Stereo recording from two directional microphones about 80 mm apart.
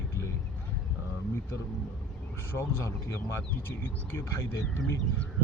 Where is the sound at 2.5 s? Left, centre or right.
Left.